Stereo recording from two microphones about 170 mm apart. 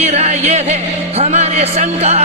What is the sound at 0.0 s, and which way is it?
Speech, 40° right (ahead or behind).